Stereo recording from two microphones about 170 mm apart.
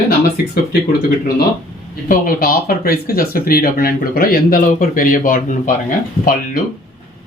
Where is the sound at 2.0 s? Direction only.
55° left (ahead or behind).